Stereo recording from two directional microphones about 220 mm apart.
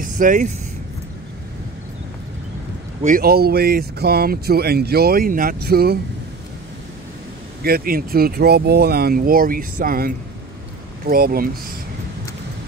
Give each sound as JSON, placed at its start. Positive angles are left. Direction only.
{"t": 0.0, "sound": "vehicle", "side_deg": -35}
{"t": 3.0, "sound": "speech", "side_deg": -40}
{"t": 7.6, "sound": "speech", "side_deg": -45}